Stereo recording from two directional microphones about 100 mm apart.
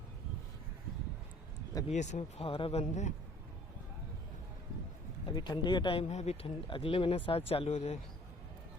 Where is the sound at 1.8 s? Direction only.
80° left.